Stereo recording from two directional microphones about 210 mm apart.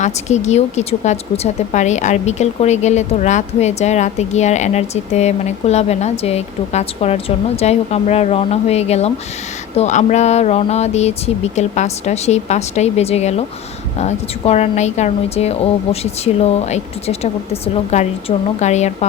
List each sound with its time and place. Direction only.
0.0 s a woman's voice: 35° left (ahead or behind)